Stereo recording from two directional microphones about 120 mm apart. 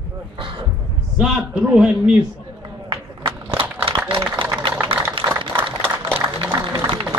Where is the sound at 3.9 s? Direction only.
50° right (ahead or behind).